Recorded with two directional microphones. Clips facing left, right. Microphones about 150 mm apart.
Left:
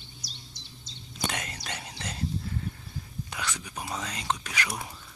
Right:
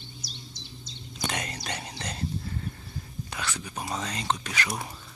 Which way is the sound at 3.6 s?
10° right (ahead or behind).